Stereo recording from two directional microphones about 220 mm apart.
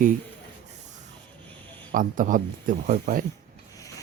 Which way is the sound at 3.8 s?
15° left (ahead or behind).